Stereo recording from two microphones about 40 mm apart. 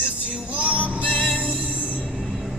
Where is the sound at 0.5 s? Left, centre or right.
Right.